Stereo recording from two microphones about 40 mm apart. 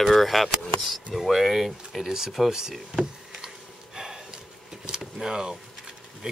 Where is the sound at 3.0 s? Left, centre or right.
Centre.